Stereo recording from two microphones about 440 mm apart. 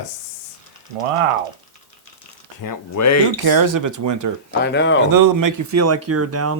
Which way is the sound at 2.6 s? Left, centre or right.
Left.